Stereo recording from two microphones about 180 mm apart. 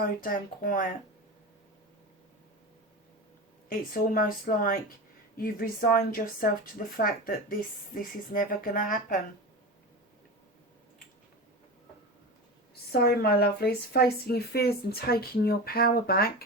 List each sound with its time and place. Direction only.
0.2 s speech: 50° left (ahead or behind)
3.7 s speech: 50° left (ahead or behind)
12.9 s speech: 60° left (ahead or behind)